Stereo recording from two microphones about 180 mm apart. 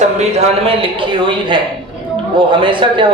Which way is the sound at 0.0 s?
35° right (ahead or behind).